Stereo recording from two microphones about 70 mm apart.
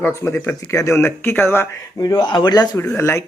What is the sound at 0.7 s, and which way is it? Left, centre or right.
Speech, left.